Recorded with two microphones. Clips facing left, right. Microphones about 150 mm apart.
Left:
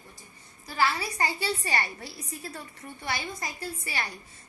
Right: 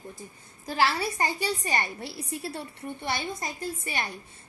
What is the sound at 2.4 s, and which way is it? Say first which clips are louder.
A woman's voice: right 5 dB; 30° right (ahead or behind).